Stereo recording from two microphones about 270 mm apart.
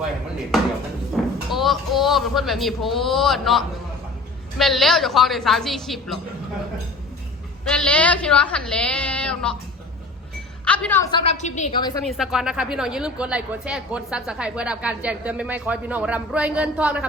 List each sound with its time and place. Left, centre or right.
0.5 s a woman's voice: centre
7.7 s a woman's voice: centre
10.7 s a woman's voice: centre
12.0 s a woman's voice: centre